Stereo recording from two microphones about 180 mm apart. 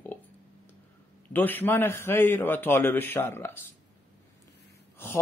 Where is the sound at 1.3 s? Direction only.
10° left (ahead or behind).